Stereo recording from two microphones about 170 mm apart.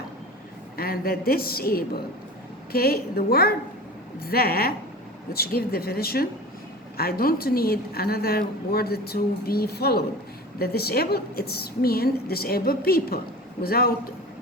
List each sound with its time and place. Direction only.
0.8 s a woman's voice: 60° left (ahead or behind)